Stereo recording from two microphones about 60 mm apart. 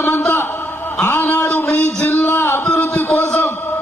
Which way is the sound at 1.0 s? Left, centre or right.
Left.